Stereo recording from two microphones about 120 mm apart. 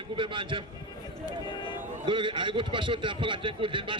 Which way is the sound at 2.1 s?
45° right (ahead or behind).